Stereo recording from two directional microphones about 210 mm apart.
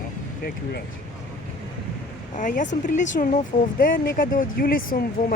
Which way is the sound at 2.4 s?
35° left (ahead or behind).